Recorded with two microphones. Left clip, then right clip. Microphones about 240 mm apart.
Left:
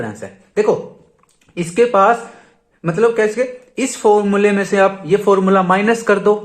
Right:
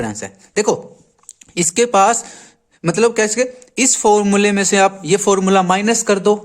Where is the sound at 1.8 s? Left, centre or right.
Right.